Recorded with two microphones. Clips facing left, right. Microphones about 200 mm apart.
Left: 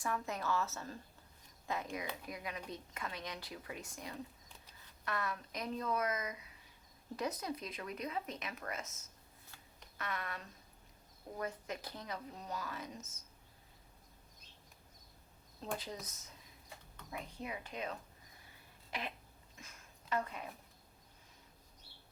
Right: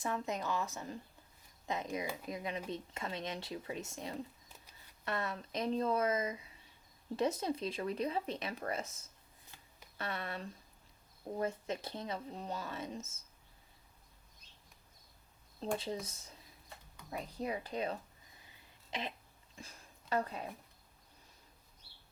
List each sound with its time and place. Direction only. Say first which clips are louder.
0.0 s a woman's voice: right 2 dB; 20° right (ahead or behind)
10.0 s speech: right 3 dB; 30° right (ahead or behind)
15.8 s speech: right 6 dB; 30° right (ahead or behind)
18.9 s throat clearing: right 2 dB; 20° right (ahead or behind)
19.5 s a sound: right 5 dB; 30° right (ahead or behind)